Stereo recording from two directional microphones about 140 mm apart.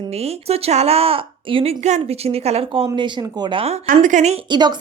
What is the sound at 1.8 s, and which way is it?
A woman's voice, 50° right (ahead or behind).